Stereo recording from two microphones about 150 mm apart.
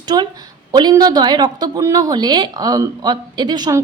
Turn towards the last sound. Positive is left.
turn(degrees=-25)  # may be behind; listen again after turning